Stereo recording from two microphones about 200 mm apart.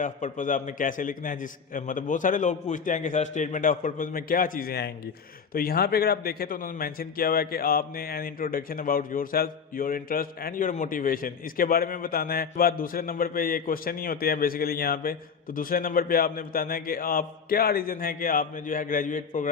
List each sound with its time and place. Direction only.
0.0 s a man's voice: 40° left (ahead or behind)